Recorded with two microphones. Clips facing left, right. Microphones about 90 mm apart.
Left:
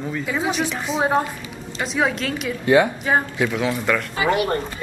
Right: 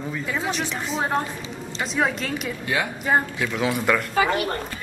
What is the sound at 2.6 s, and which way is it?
Speech, 30° left (ahead or behind).